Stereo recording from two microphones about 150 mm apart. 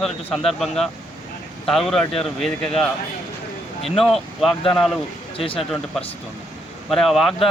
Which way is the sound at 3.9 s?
Centre (ahead or behind).